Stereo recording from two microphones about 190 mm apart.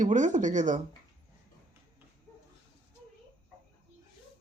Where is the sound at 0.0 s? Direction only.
40° right (ahead or behind).